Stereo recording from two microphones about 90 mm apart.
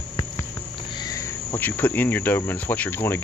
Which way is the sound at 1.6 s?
20° left (ahead or behind).